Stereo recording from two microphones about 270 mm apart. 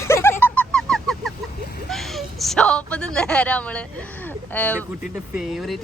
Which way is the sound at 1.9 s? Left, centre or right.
Centre.